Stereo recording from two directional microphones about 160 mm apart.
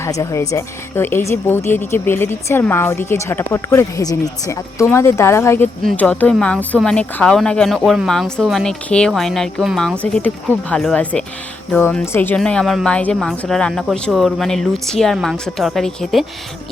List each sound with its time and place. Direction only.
0.0 s a woman's voice: 20° left (ahead or behind); by 16.2 s centre (ahead or behind)